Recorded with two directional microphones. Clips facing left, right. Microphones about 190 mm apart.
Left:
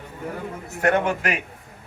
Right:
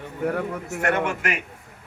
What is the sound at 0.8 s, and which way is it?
Speech, 35° left (ahead or behind).